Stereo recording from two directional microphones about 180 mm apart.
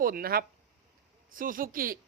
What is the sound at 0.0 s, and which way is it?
Speech, 55° right (ahead or behind).